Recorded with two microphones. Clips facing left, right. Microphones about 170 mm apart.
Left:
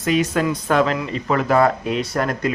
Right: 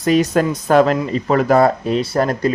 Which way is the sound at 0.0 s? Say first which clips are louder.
Right 4 dB; 35° right (ahead or behind).